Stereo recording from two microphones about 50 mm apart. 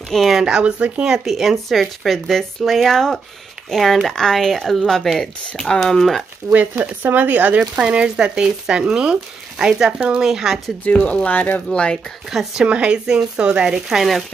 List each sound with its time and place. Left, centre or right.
0.3 s speech: centre
6.8 s speech: right
7.7 s speech: right
10.2 s speech: centre
10.9 s speech: left
11.2 s speech: left
11.7 s speech: left
12.3 s speech: centre
12.6 s speech: right
13.8 s speech: centre